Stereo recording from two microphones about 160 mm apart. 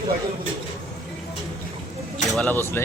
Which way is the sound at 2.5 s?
15° left (ahead or behind).